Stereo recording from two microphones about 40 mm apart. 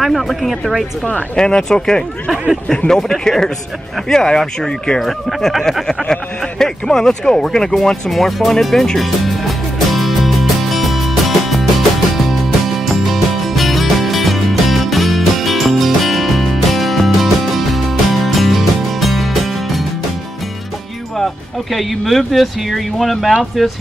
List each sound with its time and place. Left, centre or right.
0.0 s speech: centre
1.3 s speech: centre
5.0 s speech: centre
8.1 s music: centre
21.7 s speech: centre